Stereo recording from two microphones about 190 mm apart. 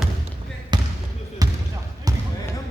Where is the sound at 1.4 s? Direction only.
20° right (ahead or behind).